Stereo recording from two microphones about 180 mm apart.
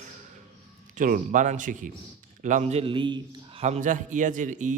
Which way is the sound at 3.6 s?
40° right (ahead or behind).